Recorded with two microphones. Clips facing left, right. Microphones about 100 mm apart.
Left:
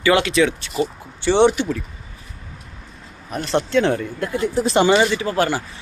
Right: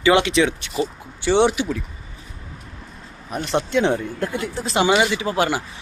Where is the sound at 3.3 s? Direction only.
15° right (ahead or behind).